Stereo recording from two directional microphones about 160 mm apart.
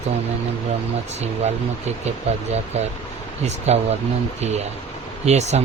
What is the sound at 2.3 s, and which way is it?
Speech, 40° right (ahead or behind).